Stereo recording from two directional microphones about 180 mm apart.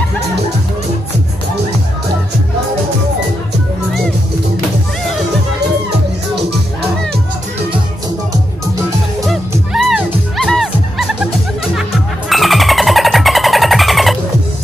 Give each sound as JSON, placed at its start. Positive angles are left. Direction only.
{"t": 9.7, "sound": "music", "side_deg": 0}
{"t": 12.3, "sound": "music", "side_deg": 0}